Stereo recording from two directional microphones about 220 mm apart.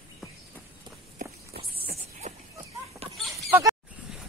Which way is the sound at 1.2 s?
45° right (ahead or behind).